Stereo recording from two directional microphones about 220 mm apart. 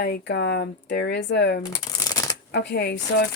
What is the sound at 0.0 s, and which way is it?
A woman's voice, 50° left (ahead or behind).